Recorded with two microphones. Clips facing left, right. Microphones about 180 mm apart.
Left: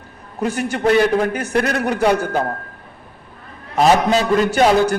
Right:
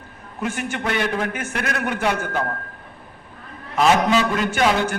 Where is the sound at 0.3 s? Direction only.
40° left (ahead or behind).